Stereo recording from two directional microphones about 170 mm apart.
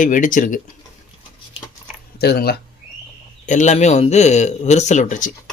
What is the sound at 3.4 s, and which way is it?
Speech, 45° left (ahead or behind).